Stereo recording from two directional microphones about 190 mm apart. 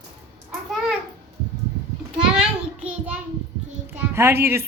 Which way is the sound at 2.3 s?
5° right (ahead or behind).